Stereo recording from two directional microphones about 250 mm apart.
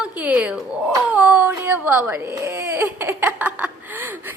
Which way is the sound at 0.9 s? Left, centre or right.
Centre.